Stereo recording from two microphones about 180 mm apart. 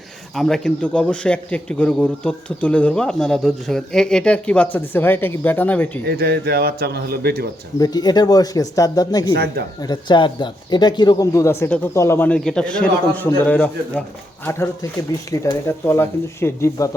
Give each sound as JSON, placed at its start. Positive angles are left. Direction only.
{"t": 0.3, "sound": "a man's voice", "side_deg": 0}
{"t": 6.1, "sound": "a man's voice", "side_deg": -60}
{"t": 7.8, "sound": "speech", "side_deg": 20}
{"t": 9.3, "sound": "a man's voice", "side_deg": -65}
{"t": 9.8, "sound": "speech", "side_deg": 25}
{"t": 15.3, "sound": "speech", "side_deg": 15}